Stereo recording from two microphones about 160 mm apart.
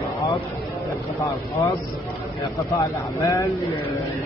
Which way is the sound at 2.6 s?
20° left (ahead or behind).